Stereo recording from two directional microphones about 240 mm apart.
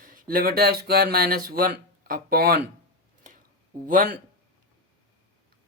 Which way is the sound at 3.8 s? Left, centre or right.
Right.